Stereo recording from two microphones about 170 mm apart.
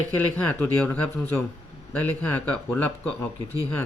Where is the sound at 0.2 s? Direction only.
10° left (ahead or behind).